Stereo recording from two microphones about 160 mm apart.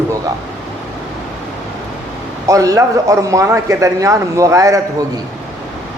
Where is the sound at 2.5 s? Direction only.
20° right (ahead or behind).